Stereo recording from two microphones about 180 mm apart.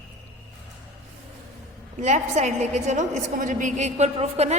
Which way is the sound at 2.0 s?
40° right (ahead or behind).